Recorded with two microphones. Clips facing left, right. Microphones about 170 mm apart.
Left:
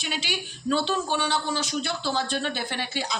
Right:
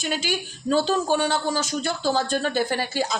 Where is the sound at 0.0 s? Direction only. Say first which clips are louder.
Right 5 dB; 45° right (ahead or behind).